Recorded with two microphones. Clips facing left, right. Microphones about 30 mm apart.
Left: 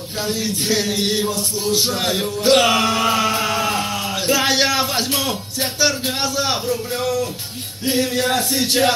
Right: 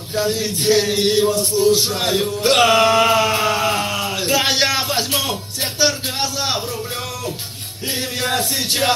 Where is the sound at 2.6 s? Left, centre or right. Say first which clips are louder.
Right 3 dB; centre.